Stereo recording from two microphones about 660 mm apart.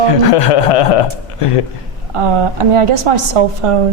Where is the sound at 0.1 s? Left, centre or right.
Left.